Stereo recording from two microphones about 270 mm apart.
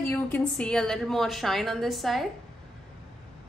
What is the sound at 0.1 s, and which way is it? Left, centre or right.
A woman's voice, centre.